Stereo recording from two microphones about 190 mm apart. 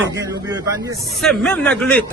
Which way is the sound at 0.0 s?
20° right (ahead or behind).